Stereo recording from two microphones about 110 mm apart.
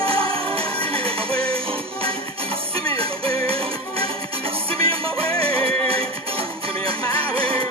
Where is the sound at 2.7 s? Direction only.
60° right (ahead or behind).